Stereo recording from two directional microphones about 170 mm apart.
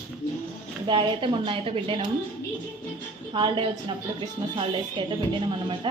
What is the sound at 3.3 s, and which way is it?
Speech, 30° right (ahead or behind).